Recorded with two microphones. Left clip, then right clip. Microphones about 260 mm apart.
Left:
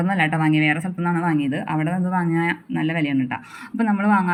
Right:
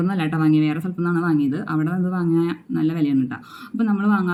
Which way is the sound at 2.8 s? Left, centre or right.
Centre.